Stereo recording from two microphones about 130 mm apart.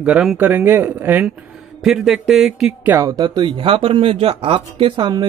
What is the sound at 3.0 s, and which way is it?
A man's voice, 30° right (ahead or behind).